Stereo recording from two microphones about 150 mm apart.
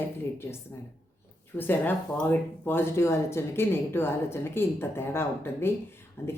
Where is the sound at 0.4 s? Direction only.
15° left (ahead or behind).